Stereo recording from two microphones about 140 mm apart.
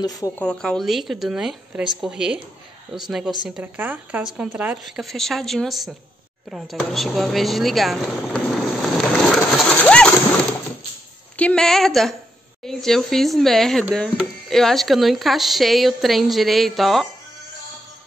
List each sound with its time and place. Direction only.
0.0 s speech: 25° left (ahead or behind)
0.4 s a woman's voice: 5° left (ahead or behind); by 4.7 s 10° right (ahead or behind)
4.8 s speech: centre (ahead or behind)
6.5 s a sound: centre (ahead or behind)
11.3 s speech: 5° left (ahead or behind)